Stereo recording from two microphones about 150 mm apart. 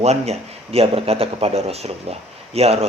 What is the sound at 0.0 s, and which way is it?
A man's voice, 45° right (ahead or behind).